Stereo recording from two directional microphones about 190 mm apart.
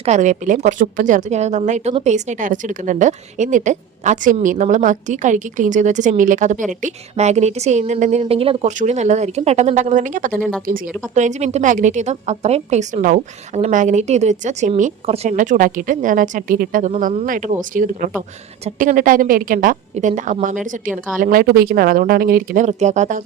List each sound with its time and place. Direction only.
0.0 s a woman's voice: 40° right (ahead or behind)